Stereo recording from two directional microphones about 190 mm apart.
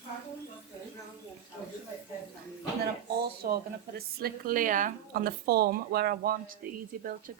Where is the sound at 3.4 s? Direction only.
55° right (ahead or behind).